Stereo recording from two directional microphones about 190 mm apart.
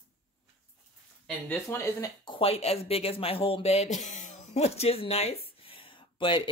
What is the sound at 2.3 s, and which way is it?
Speech, 30° left (ahead or behind).